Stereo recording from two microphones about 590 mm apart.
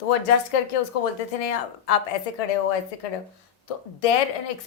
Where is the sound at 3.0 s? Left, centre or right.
Left.